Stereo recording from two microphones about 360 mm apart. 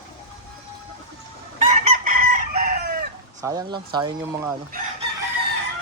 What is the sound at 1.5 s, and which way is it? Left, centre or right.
Chicken, right.